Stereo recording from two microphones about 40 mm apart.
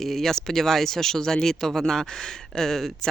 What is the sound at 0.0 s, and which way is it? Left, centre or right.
Speech, centre.